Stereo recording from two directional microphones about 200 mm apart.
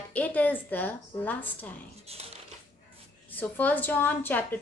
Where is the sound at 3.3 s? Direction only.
10° left (ahead or behind).